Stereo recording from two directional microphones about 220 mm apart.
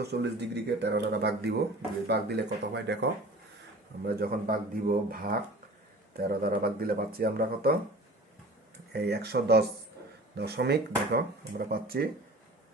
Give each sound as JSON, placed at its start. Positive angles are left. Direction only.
{"t": 0.0, "sound": "speech", "side_deg": -50}
{"t": 8.9, "sound": "speech", "side_deg": -50}